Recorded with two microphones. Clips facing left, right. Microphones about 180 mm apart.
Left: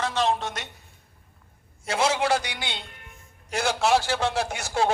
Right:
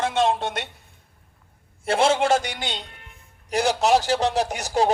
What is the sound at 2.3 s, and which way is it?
Speech, 45° right (ahead or behind).